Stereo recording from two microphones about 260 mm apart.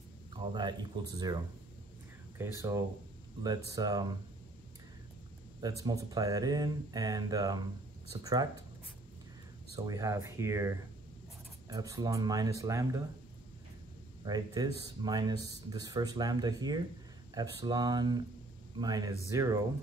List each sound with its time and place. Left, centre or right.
0.3 s speech: centre
5.6 s speech: centre
9.8 s speech: centre
14.2 s speech: centre